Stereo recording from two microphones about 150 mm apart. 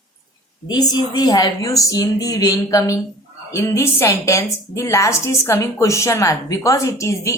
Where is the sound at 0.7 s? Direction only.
25° left (ahead or behind).